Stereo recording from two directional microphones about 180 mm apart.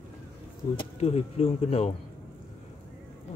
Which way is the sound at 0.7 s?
35° left (ahead or behind).